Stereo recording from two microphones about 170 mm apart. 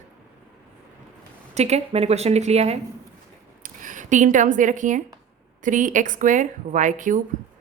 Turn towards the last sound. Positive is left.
turn(degrees=-50)  # may be behind; listen again after turning